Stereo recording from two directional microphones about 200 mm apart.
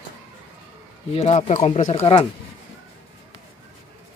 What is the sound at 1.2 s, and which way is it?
Speech, 35° left (ahead or behind).